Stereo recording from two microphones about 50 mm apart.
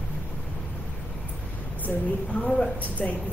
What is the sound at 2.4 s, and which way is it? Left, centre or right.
Speech, left.